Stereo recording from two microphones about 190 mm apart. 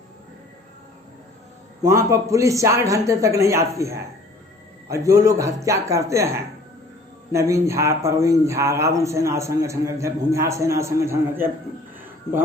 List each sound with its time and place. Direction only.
1.8 s a man's voice: 15° right (ahead or behind)